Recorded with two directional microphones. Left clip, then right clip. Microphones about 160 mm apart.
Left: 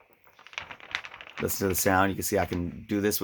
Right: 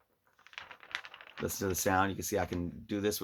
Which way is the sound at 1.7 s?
50° left (ahead or behind).